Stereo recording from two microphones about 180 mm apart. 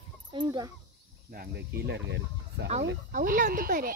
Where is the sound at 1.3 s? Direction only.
55° right (ahead or behind); by 2.7 s 75° right (ahead or behind).